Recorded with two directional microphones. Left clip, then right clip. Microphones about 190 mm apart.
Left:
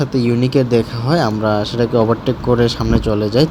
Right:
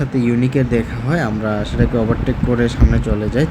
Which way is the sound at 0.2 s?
25° left (ahead or behind).